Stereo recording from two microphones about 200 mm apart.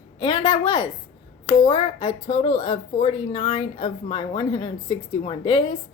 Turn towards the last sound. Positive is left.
turn(degrees=25)  # may be behind; listen again after turning